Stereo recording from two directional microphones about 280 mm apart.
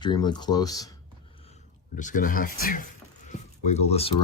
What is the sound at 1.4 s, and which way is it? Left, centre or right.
Speech, left.